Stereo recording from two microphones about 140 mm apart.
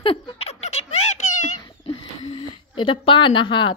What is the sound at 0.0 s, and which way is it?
Giggle, 45° left (ahead or behind).